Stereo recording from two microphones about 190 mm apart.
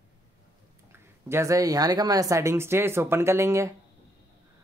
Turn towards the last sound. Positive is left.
turn(degrees=-15)  # may be behind; listen again after turning